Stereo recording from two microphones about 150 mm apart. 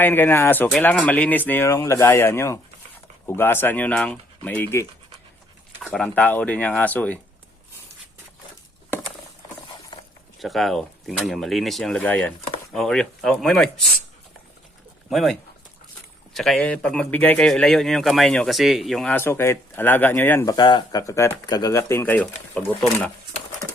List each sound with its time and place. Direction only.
0.0 s speech: 15° left (ahead or behind)
5.8 s speech: 5° left (ahead or behind)
9.9 s a sound: 30° left (ahead or behind)
10.4 s speech: centre (ahead or behind)
15.1 s speech: centre (ahead or behind)
19.1 s speech: 15° left (ahead or behind)